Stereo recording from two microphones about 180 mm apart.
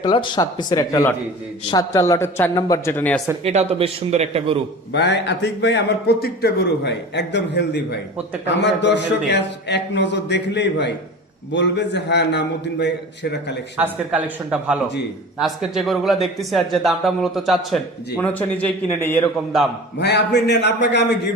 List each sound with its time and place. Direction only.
0.0 s speech: 25° left (ahead or behind); by 3.2 s 10° left (ahead or behind)
3.4 s a man's voice: 35° right (ahead or behind)
4.9 s a man's voice: 70° left (ahead or behind)
13.7 s speech: 10° right (ahead or behind); by 19.2 s 10° left (ahead or behind)
20.0 s a man's voice: 70° left (ahead or behind)